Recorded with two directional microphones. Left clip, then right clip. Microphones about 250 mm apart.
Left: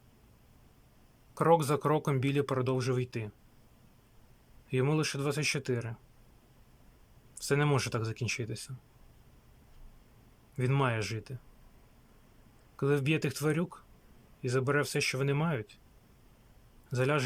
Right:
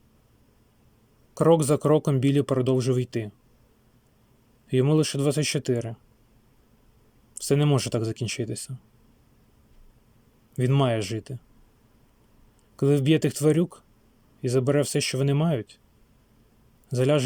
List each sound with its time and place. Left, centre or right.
1.3 s speech: centre
4.7 s speech: centre
7.3 s speech: centre
10.5 s speech: centre
12.7 s speech: centre
16.9 s speech: centre